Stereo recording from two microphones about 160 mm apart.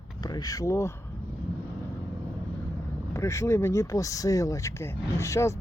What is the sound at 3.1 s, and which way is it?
Speech, 15° left (ahead or behind).